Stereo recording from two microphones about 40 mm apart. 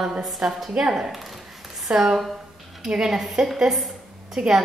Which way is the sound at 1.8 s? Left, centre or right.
Centre.